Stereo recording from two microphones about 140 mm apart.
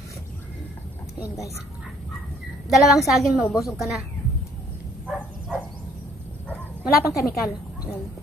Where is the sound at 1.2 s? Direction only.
20° left (ahead or behind).